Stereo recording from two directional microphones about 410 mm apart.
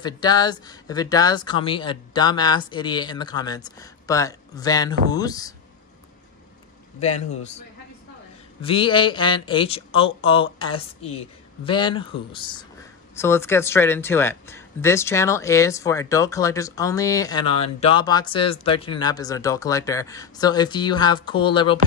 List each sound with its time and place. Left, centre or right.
0.0 s speech: centre
7.0 s speech: centre
8.6 s speech: centre